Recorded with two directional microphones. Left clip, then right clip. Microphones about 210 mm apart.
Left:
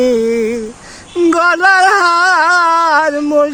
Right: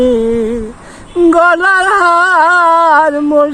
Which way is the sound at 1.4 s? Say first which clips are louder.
Even; 35° left (ahead or behind).